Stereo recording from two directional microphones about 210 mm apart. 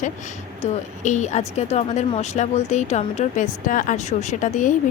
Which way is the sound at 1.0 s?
35° left (ahead or behind).